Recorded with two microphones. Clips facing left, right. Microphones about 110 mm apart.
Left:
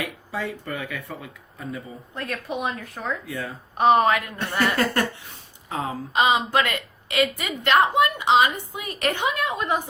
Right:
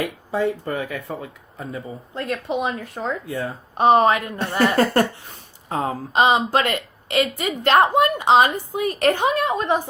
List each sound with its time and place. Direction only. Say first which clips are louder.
0.0 s a woman's voice: right 7 dB; 30° right (ahead or behind)